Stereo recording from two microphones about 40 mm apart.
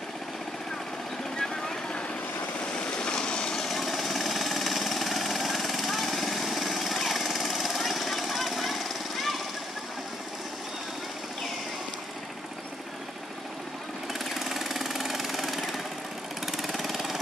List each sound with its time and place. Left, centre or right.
3.0 s vehicle: left
3.5 s jackhammer: centre
14.3 s jackhammer: centre
16.5 s engine: centre